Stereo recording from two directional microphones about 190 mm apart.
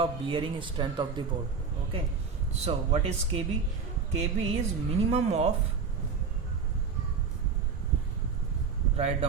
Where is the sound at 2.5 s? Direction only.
35° right (ahead or behind).